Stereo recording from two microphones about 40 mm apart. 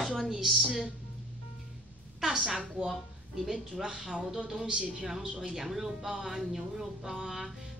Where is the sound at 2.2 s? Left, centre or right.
Centre.